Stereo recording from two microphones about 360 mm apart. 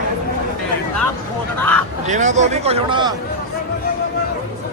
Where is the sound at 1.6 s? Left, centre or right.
Centre.